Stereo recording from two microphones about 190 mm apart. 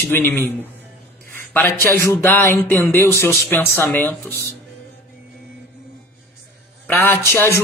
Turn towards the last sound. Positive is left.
turn(degrees=10)  # may be behind; listen again after turning